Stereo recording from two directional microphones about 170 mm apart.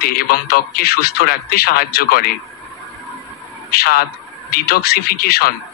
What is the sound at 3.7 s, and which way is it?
A man's voice, 65° left (ahead or behind).